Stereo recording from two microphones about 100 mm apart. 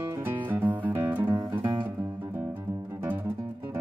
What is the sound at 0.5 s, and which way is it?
Music, 15° right (ahead or behind).